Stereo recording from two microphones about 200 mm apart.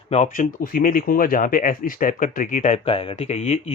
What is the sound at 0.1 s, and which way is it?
Speech, 40° left (ahead or behind).